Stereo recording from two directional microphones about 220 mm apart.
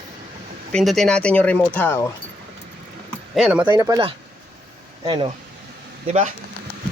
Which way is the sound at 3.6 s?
15° right (ahead or behind).